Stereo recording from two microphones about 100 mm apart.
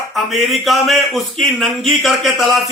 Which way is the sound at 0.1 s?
Centre (ahead or behind).